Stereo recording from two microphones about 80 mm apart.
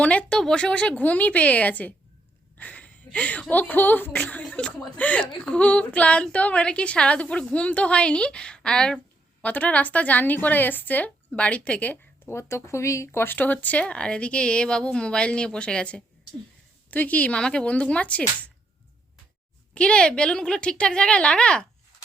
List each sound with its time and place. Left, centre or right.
0.0 s a woman's voice: centre
2.6 s a sound: centre
3.5 s a woman's voice: left
9.4 s speech: centre
12.3 s a woman's voice: left; by 18.5 s centre
19.7 s a woman's voice: centre